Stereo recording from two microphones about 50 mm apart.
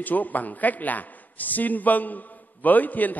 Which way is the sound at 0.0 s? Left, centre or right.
Left.